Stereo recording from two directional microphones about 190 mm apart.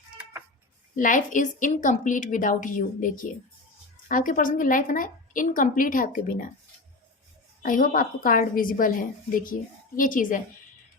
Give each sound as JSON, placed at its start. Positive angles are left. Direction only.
{"t": 0.9, "sound": "a woman's voice", "side_deg": 45}
{"t": 7.6, "sound": "a woman's voice", "side_deg": 45}